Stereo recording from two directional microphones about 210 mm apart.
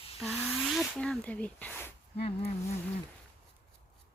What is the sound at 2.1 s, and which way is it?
Speech, 30° left (ahead or behind).